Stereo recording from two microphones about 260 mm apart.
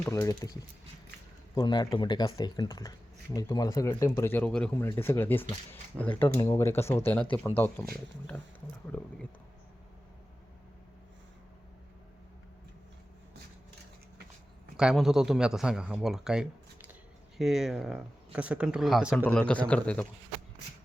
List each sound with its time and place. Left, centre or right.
0.0 s speech: centre
14.8 s speech: centre